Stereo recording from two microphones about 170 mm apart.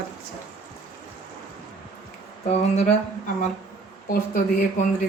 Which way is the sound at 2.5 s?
40° left (ahead or behind).